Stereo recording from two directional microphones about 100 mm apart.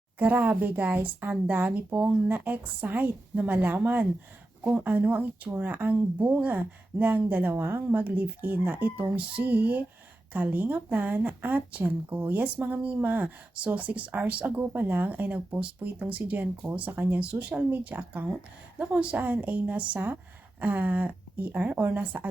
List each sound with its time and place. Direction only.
0.2 s a woman's voice: 15° right (ahead or behind)